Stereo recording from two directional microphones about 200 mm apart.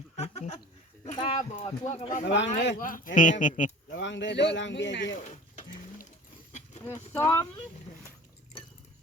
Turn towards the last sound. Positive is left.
turn(degrees=10)  # may be behind; listen again after turning